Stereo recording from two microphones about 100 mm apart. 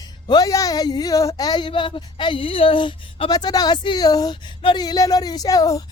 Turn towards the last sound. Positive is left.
turn(degrees=35)  # may be behind; listen again after turning